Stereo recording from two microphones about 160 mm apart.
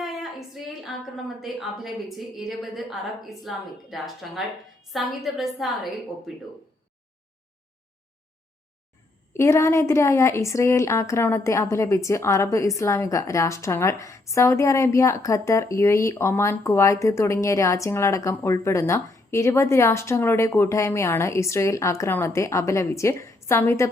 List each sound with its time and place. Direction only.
0.0 s a sound: centre (ahead or behind)
1.4 s a woman's voice: centre (ahead or behind)
9.3 s a woman's voice: 15° left (ahead or behind)